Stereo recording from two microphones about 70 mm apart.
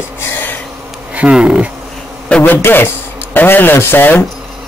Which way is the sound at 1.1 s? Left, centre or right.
Centre.